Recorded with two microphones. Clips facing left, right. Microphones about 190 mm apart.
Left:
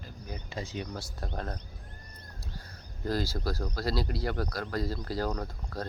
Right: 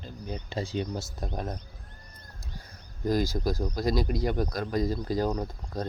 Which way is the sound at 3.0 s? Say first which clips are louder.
Right 5 dB; 15° right (ahead or behind).